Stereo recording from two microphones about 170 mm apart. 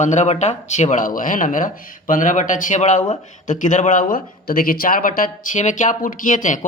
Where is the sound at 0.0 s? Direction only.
45° left (ahead or behind).